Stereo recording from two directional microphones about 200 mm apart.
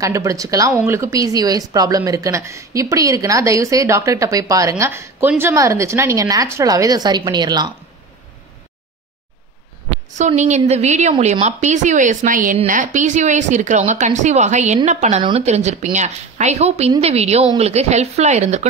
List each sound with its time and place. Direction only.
0.0 s speech: 15° right (ahead or behind)
10.1 s a woman's voice: 35° right (ahead or behind)